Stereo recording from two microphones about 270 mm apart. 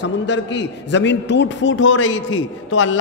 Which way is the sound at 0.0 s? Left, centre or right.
Left.